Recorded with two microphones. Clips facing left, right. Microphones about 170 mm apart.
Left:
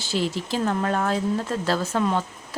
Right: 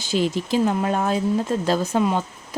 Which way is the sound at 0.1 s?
15° right (ahead or behind).